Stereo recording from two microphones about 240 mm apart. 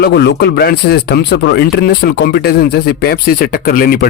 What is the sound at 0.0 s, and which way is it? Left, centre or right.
Speech, left.